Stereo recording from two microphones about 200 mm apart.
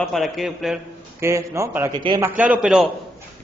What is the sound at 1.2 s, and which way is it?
A man's voice, 15° right (ahead or behind).